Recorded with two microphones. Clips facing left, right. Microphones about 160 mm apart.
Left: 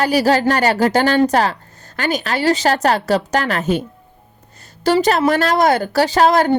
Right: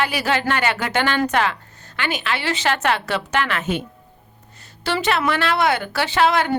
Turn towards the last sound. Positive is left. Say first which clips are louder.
# left 5 dB
turn(degrees=40)  # may be behind; listen again after turning